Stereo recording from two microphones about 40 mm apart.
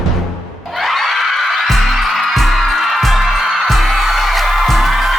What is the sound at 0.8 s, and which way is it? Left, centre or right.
Music, centre.